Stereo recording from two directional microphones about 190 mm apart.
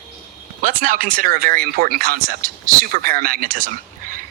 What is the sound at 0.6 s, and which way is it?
Speech, 45° right (ahead or behind).